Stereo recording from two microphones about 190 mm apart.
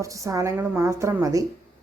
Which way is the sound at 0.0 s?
15° right (ahead or behind).